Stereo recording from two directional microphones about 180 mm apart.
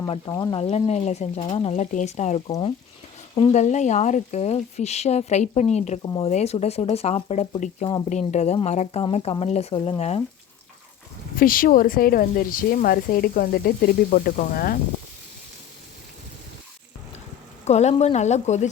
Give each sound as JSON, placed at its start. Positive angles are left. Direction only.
{"t": 0.1, "sound": "speech", "side_deg": 20}
{"t": 0.6, "sound": "speech", "side_deg": 35}
{"t": 2.5, "sound": "speech", "side_deg": 25}
{"t": 11.3, "sound": "speech", "side_deg": 50}
{"t": 17.7, "sound": "speech", "side_deg": 40}